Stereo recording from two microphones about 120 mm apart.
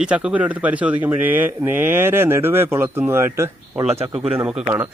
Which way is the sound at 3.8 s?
60° right (ahead or behind).